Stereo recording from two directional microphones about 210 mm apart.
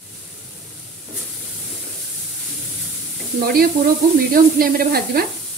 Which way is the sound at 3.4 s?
45° right (ahead or behind).